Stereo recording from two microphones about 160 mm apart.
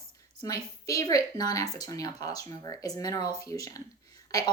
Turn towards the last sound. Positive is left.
turn(degrees=20)  # may be behind; listen again after turning